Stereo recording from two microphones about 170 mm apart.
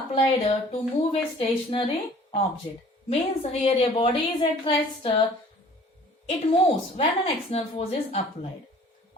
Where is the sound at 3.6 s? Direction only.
35° left (ahead or behind).